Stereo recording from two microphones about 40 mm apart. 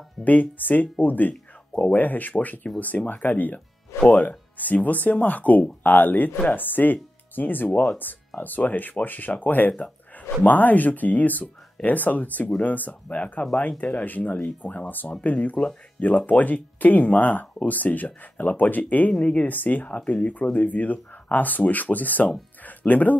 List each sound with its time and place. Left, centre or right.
0.2 s speech: left
1.7 s speech: left
2.0 s speech: left
14.0 s speech: left
22.6 s music: left